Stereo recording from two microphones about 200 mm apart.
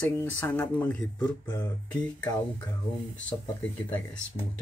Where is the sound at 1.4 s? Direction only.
20° left (ahead or behind).